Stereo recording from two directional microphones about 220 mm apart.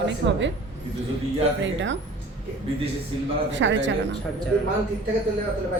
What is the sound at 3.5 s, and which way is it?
Speech, 55° right (ahead or behind).